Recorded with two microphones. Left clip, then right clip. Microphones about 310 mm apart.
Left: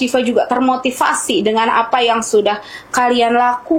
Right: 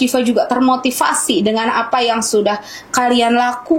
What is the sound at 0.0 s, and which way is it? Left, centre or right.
A woman's voice, centre.